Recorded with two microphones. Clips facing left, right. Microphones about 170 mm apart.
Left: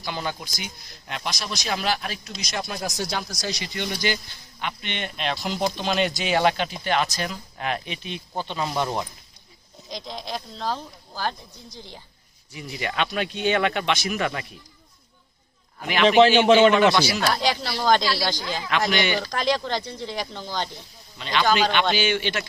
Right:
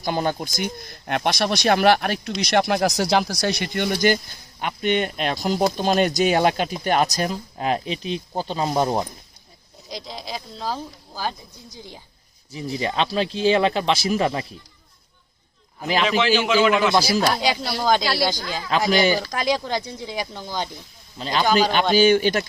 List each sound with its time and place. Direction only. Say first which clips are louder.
0.0 s speech: right 7 dB; 45° right (ahead or behind)
9.9 s speech: even; 5° right (ahead or behind)
12.5 s speech: right 4 dB; 30° right (ahead or behind)
16.0 s a man's voice: left 7 dB; 35° left (ahead or behind)
16.9 s speech: right 3 dB; 35° right (ahead or behind)
17.3 s speech: right 2 dB; 5° right (ahead or behind)
18.9 s speech: right 7 dB; 35° right (ahead or behind)
19.3 s speech: right 1 dB; 10° right (ahead or behind)
21.2 s speech: right 2 dB; 35° right (ahead or behind)